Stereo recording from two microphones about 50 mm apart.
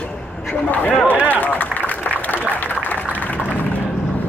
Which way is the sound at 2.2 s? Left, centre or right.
Left.